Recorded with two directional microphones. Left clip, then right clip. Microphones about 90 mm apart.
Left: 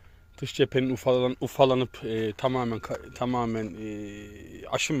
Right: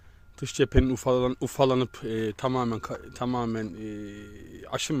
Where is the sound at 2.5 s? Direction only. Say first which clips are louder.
Right 1 dB; 55° right (ahead or behind).